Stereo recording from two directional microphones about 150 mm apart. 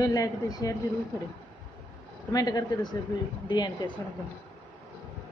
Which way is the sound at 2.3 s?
25° left (ahead or behind).